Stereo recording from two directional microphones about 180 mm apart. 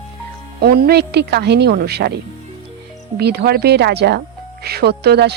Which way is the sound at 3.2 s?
65° right (ahead or behind).